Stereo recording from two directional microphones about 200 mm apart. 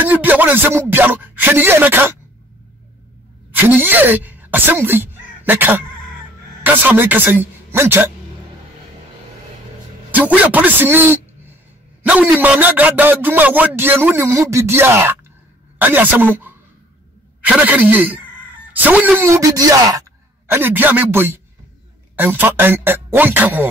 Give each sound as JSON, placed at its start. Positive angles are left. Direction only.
{"t": 0.0, "sound": "a man's voice", "side_deg": -10}
{"t": 3.5, "sound": "a man's voice", "side_deg": -10}
{"t": 10.1, "sound": "a man's voice", "side_deg": -5}
{"t": 17.6, "sound": "a man's voice", "side_deg": -10}